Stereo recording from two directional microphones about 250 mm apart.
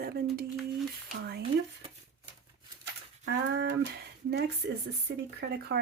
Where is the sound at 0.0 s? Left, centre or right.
Right.